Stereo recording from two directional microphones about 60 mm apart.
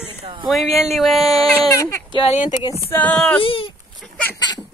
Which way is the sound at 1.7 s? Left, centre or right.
Left.